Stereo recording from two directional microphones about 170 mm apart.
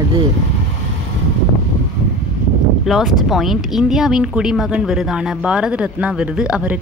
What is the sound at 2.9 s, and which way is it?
Speech, centre (ahead or behind).